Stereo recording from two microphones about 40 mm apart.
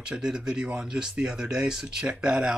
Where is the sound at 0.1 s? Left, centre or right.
Right.